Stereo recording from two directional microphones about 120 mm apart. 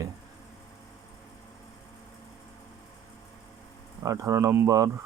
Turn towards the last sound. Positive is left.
turn(degrees=-30)  # may be behind; listen again after turning